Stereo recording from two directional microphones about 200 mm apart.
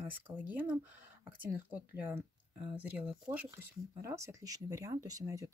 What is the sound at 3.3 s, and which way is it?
Speech, 10° right (ahead or behind).